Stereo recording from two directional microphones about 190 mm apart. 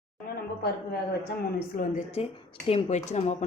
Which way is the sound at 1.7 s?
45° left (ahead or behind).